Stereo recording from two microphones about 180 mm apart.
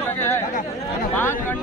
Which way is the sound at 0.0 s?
10° left (ahead or behind).